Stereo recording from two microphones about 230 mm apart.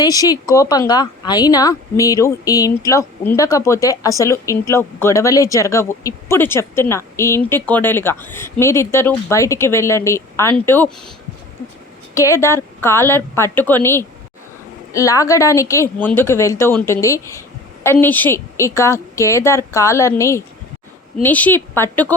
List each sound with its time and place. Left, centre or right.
0.0 s speech: centre
12.1 s speech: centre